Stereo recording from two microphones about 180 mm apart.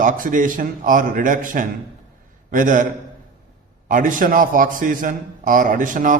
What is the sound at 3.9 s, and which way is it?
A man's voice, 50° right (ahead or behind).